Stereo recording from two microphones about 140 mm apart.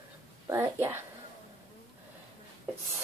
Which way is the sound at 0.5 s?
20° right (ahead or behind).